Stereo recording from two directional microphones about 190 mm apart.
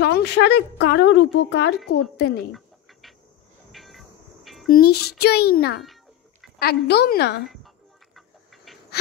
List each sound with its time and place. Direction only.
0.0 s a woman's voice: 60° left (ahead or behind)
2.5 s bird: centre (ahead or behind)
3.7 s train: centre (ahead or behind)
4.6 s a woman's voice: 55° left (ahead or behind)
8.7 s a sound: centre (ahead or behind)